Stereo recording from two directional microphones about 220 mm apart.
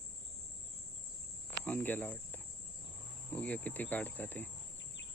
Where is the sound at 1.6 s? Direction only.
5° left (ahead or behind).